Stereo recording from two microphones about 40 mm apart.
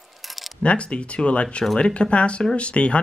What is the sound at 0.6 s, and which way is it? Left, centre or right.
Speech, left.